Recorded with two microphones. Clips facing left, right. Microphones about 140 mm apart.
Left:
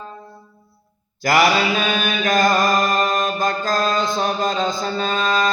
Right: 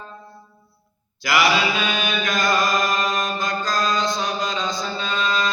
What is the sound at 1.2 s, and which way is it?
Mantra, 50° left (ahead or behind).